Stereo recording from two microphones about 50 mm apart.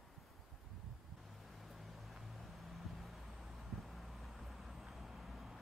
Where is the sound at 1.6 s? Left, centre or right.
Centre.